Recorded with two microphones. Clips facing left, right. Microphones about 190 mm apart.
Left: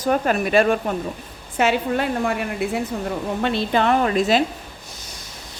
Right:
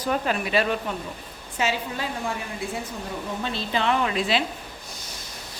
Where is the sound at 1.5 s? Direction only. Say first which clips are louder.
Left 8 dB; 60° left (ahead or behind).